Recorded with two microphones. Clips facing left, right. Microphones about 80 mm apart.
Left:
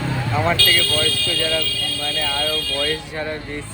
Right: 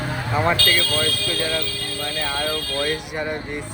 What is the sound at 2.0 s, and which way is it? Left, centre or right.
Music, centre.